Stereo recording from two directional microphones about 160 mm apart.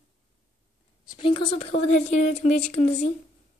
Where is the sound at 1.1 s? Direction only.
35° left (ahead or behind).